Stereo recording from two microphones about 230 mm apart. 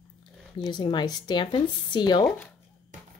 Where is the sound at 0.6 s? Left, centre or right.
Centre.